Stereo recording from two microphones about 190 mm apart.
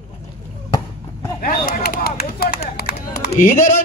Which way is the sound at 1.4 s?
50° left (ahead or behind).